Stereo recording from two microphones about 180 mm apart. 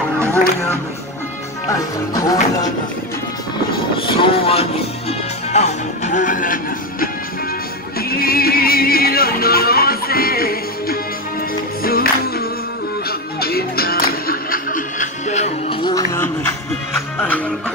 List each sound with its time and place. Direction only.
1.7 s speech: 20° left (ahead or behind)
4.0 s speech: 30° left (ahead or behind)
5.5 s music: 40° left (ahead or behind)
8.2 s music: 55° left (ahead or behind); by 15.8 s 40° left (ahead or behind)
15.8 s music: 20° left (ahead or behind)